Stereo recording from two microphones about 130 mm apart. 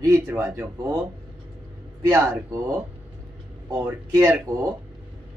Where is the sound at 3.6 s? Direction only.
25° right (ahead or behind).